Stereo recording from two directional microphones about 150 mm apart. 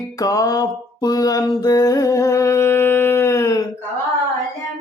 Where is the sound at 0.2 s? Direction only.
25° left (ahead or behind).